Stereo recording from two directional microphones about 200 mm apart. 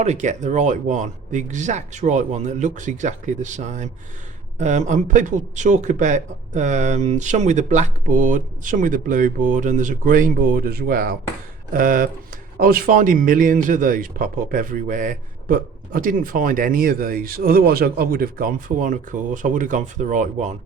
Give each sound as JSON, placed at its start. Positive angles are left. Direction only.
{"t": 0.0, "sound": "speech", "side_deg": -35}